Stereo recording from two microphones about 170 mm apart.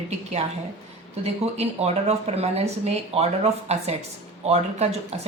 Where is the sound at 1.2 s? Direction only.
40° right (ahead or behind).